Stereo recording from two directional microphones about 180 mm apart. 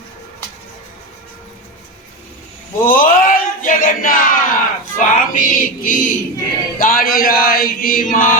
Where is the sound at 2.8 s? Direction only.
50° left (ahead or behind).